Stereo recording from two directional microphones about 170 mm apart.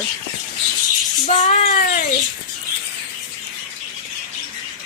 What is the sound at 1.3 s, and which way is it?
Speech, 45° left (ahead or behind).